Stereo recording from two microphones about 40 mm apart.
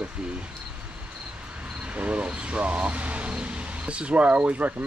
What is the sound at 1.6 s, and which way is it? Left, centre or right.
Speech, right.